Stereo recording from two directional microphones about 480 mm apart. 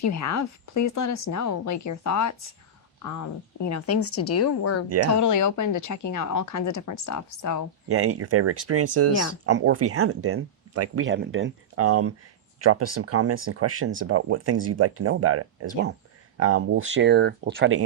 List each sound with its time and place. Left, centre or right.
0.0 s speech: left
3.6 s a woman's voice: left
7.9 s speech: right